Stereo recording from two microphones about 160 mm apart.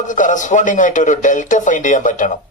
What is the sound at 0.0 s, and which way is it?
A man's voice, 55° left (ahead or behind).